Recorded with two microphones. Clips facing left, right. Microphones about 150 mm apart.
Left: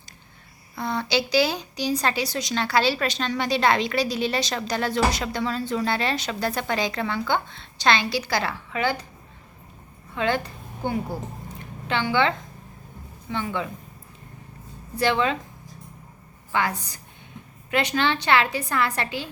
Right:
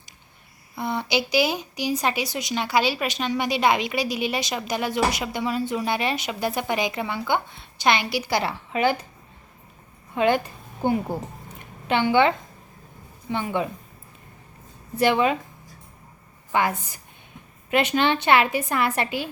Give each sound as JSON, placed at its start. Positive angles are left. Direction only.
{"t": 0.8, "sound": "a woman's voice", "side_deg": -15}
{"t": 10.2, "sound": "a woman's voice", "side_deg": -15}
{"t": 13.3, "sound": "a woman's voice", "side_deg": -15}
{"t": 14.9, "sound": "a woman's voice", "side_deg": -15}
{"t": 16.5, "sound": "a woman's voice", "side_deg": -20}